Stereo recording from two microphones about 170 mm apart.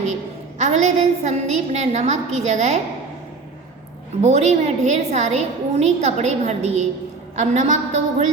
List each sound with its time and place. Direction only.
0.6 s a woman's voice: 45° right (ahead or behind)
4.2 s a woman's voice: 40° right (ahead or behind)